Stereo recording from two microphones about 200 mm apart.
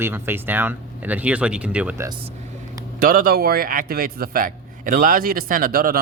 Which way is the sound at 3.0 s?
45° right (ahead or behind).